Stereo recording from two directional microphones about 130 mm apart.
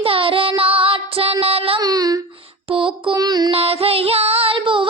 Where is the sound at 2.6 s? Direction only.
45° right (ahead or behind).